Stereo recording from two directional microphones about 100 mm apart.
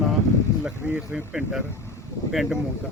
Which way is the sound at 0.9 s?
15° right (ahead or behind).